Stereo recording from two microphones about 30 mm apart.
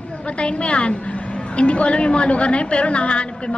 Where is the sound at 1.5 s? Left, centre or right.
Left.